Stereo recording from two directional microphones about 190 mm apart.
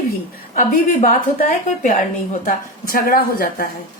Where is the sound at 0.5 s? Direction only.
45° left (ahead or behind).